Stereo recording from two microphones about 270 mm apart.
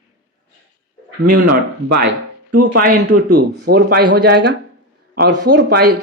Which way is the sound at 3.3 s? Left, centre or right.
Right.